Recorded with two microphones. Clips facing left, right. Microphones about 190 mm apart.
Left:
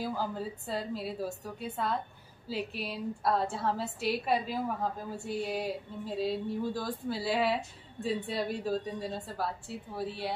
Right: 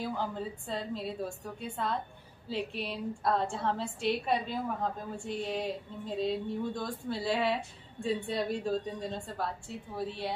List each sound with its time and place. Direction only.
0.0 s speech: 5° left (ahead or behind)